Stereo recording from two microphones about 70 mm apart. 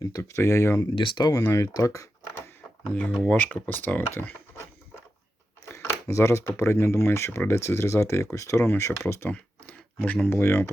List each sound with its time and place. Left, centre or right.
0.2 s speech: left
0.8 s speech: left
1.5 s speech: left
3.2 s speech: left
5.6 s a sound: left
6.6 s speech: left
9.3 s speech: left